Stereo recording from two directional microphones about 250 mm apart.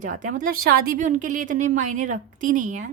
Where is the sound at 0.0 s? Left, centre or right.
Right.